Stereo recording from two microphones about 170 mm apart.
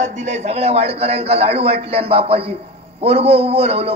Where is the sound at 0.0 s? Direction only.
45° right (ahead or behind).